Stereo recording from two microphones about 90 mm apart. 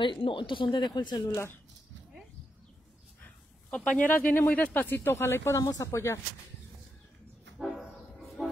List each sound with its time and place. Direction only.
0.0 s speech: 70° left (ahead or behind); by 1.3 s 55° left (ahead or behind)
1.3 s speech: 30° left (ahead or behind)
3.7 s speech: 15° left (ahead or behind)
5.6 s speech: 40° left (ahead or behind)